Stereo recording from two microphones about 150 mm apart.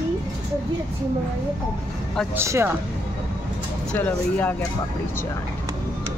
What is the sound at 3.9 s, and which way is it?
Speech, 10° left (ahead or behind).